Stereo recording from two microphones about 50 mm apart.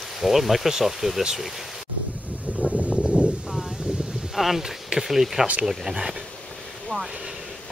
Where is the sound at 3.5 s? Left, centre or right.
Centre.